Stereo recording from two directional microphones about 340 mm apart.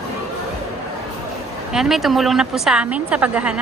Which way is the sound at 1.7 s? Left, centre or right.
Centre.